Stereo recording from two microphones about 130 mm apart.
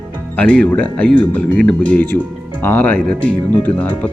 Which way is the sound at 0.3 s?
10° left (ahead or behind).